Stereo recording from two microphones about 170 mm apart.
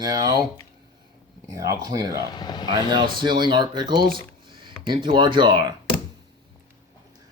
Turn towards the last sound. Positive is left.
turn(degrees=-25)  # may be behind; listen again after turning